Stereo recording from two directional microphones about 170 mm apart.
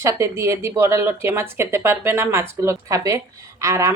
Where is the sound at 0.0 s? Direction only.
15° right (ahead or behind).